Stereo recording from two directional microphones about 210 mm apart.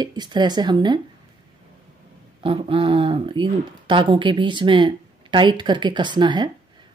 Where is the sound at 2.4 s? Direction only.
25° right (ahead or behind).